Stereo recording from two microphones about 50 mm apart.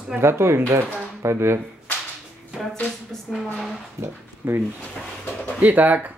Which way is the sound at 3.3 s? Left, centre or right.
Centre.